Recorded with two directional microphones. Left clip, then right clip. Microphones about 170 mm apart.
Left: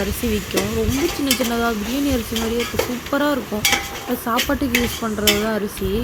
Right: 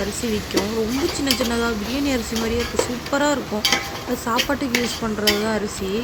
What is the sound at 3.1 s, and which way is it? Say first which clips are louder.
Speech: even; 20° left (ahead or behind).